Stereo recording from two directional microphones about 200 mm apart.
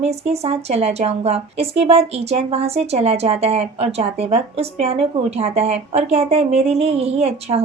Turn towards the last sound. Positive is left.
turn(degrees=-30)  # may be behind; listen again after turning